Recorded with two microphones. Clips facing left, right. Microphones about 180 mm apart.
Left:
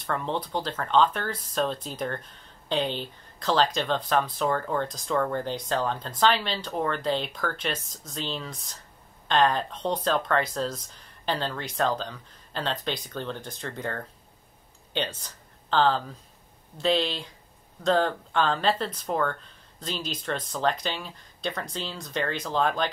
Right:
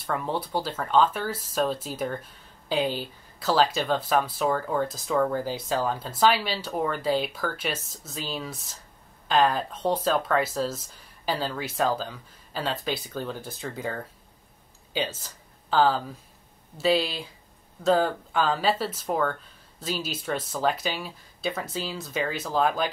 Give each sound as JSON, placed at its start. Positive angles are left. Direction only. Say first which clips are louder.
{"t": 0.0, "sound": "speech", "louder": "right 1 dB", "side_deg": -5}